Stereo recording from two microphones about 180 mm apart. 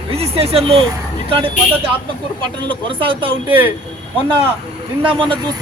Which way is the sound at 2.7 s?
30° right (ahead or behind).